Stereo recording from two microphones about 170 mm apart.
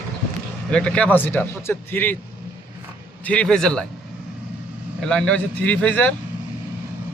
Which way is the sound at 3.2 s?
5° left (ahead or behind).